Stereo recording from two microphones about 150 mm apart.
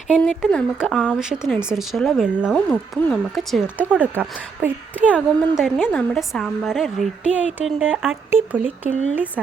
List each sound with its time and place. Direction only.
0.1 s a woman's voice: 5° left (ahead or behind)
3.8 s speech: 10° right (ahead or behind)
5.4 s a woman's voice: centre (ahead or behind)